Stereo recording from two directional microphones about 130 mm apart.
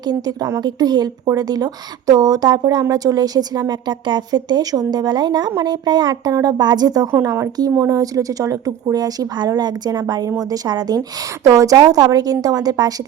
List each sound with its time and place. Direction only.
0.1 s speech: 30° right (ahead or behind)